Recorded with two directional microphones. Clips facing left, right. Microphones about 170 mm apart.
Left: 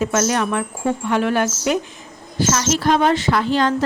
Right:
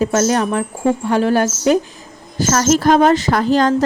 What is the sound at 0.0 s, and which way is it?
Speech, 35° right (ahead or behind).